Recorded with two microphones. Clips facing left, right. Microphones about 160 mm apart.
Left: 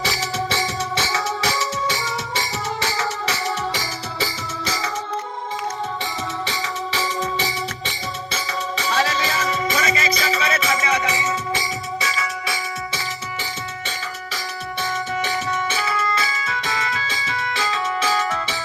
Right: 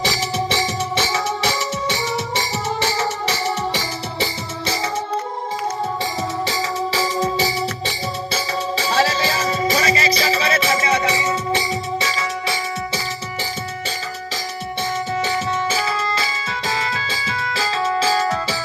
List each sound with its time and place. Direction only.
0.1 s music: 25° right (ahead or behind)
6.4 s music: 35° right (ahead or behind)
14.8 s music: 30° right (ahead or behind)